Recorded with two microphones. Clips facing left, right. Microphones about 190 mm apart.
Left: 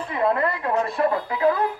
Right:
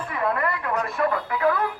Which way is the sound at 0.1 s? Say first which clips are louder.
Left 4 dB; 25° left (ahead or behind).